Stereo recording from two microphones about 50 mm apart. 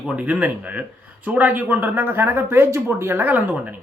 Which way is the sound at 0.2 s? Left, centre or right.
Right.